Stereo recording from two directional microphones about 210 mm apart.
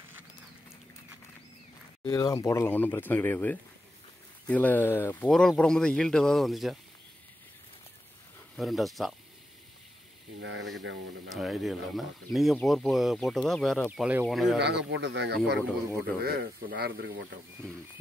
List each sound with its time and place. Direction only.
2.0 s speech: 20° left (ahead or behind); by 6.8 s centre (ahead or behind)
8.5 s speech: centre (ahead or behind)
10.4 s speech: 60° right (ahead or behind)
11.2 s speech: centre (ahead or behind)
14.6 s speech: 55° right (ahead or behind)